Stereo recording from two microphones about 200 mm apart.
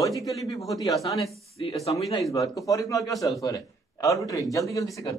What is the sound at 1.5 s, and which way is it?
Speech, 30° left (ahead or behind).